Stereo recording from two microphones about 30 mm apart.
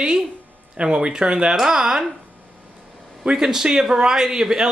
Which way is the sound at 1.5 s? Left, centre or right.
Centre.